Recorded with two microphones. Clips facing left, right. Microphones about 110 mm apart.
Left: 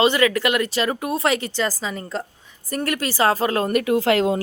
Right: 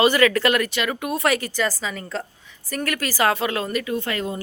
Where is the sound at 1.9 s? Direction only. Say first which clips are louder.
Left 2 dB; 5° left (ahead or behind).